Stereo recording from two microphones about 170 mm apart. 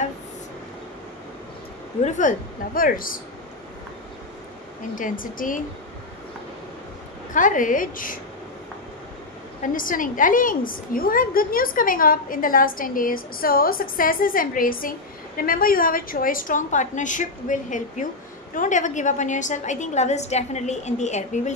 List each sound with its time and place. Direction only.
2.0 s a woman's voice: 50° left (ahead or behind)
4.9 s a woman's voice: 50° left (ahead or behind)
7.3 s a woman's voice: 50° left (ahead or behind)
9.6 s a woman's voice: 50° left (ahead or behind)